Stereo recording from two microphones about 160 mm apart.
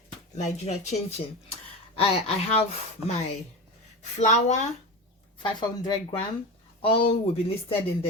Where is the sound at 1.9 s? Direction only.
40° left (ahead or behind).